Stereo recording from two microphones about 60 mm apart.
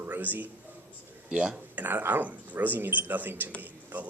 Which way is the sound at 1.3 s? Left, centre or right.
Centre.